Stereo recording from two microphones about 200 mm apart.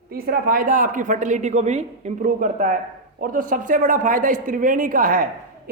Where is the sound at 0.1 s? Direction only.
45° right (ahead or behind).